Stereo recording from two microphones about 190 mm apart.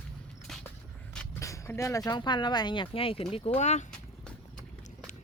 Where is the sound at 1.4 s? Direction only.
15° left (ahead or behind); by 3.8 s 35° left (ahead or behind).